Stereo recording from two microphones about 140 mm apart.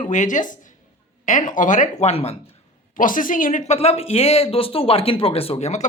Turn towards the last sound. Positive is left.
turn(degrees=55)  # may be behind; listen again after turning